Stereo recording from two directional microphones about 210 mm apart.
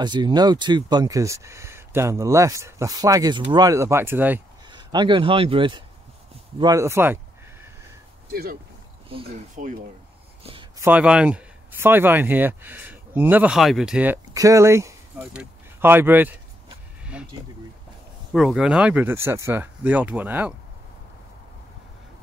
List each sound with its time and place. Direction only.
0.0 s speech: 20° right (ahead or behind)
4.6 s speech: 20° right (ahead or behind)
8.3 s speech: 45° right (ahead or behind)
9.1 s speech: 25° right (ahead or behind)
9.6 s speech: 40° right (ahead or behind)
10.4 s a sound: 25° right (ahead or behind)
10.8 s speech: 5° right (ahead or behind)
17.0 s a sound: 5° right (ahead or behind)
18.3 s speech: centre (ahead or behind)